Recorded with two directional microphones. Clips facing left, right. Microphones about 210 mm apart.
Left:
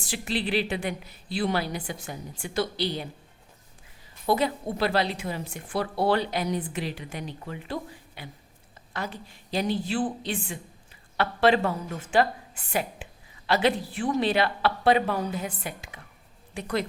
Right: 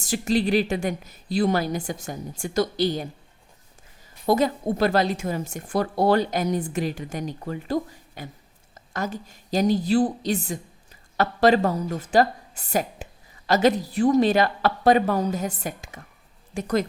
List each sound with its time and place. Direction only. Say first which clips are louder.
0.0 s a woman's voice: right 7 dB; 45° right (ahead or behind)
4.3 s a woman's voice: right 4 dB; 45° right (ahead or behind)